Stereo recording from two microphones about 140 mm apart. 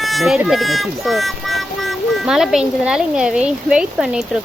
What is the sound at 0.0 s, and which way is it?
Speech, centre (ahead or behind).